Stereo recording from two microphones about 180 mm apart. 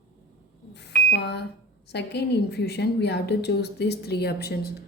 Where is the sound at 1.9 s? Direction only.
70° left (ahead or behind).